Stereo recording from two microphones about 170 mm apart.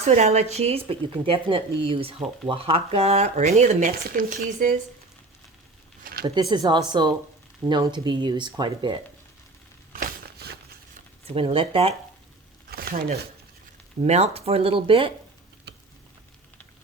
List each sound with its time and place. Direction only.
0.0 s speech: 40° right (ahead or behind)
6.2 s speech: 25° right (ahead or behind)
9.9 s a sound: 65° right (ahead or behind)
11.3 s speech: 35° right (ahead or behind)
12.7 s speech: 60° right (ahead or behind)
14.0 s speech: 35° right (ahead or behind)